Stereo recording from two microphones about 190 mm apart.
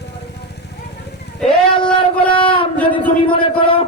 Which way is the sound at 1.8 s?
5° left (ahead or behind).